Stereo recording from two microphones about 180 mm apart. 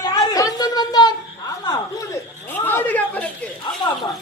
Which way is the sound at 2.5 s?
10° left (ahead or behind).